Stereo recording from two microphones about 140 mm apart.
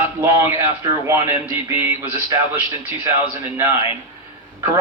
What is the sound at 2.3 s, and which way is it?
Speech, 20° right (ahead or behind).